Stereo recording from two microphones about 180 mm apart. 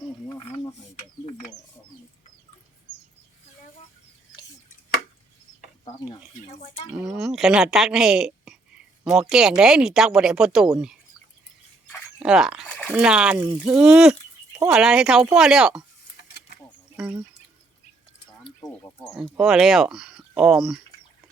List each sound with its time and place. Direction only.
0.3 s snake: 15° left (ahead or behind)
0.9 s a sound: 40° left (ahead or behind)
5.8 s a sound: 35° left (ahead or behind)
7.1 s a woman's voice: 5° right (ahead or behind)
12.2 s speech: 5° right (ahead or behind)
19.4 s speech: 5° right (ahead or behind)